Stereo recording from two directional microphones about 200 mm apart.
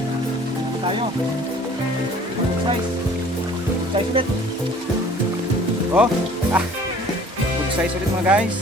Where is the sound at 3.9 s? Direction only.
30° right (ahead or behind).